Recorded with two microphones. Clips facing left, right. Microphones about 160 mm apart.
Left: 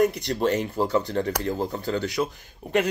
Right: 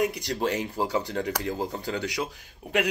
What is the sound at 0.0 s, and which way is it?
Speech, 50° left (ahead or behind).